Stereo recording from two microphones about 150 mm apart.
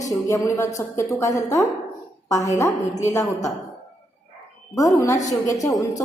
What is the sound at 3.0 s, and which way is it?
Speech, 20° left (ahead or behind).